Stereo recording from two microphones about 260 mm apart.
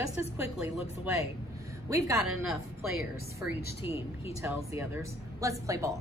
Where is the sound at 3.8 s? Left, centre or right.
Left.